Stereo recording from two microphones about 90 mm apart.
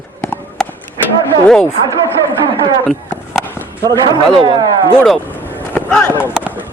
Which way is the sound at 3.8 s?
45° right (ahead or behind).